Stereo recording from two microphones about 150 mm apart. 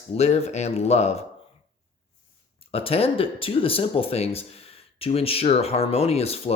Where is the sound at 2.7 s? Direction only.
40° left (ahead or behind).